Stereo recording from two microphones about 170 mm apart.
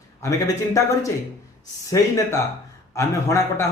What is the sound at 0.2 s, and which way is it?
A man's voice, 20° left (ahead or behind).